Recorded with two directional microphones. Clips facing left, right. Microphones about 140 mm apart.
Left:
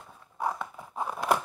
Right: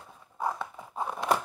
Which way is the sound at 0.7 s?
10° right (ahead or behind).